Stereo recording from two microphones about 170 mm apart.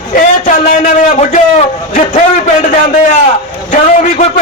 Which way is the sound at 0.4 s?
50° left (ahead or behind).